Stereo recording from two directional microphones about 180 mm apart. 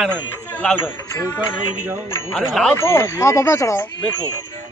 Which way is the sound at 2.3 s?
5° left (ahead or behind).